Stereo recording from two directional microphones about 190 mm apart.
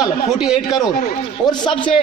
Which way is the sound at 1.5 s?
25° left (ahead or behind).